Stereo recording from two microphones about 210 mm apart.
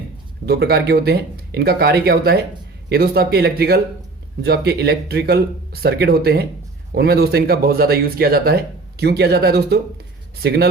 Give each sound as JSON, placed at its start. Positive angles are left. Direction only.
{"t": 0.4, "sound": "speech", "side_deg": -50}